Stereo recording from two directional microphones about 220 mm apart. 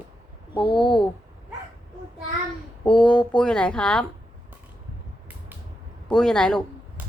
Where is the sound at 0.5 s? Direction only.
25° left (ahead or behind).